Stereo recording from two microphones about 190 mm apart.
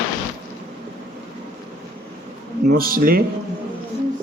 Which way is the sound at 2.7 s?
50° right (ahead or behind).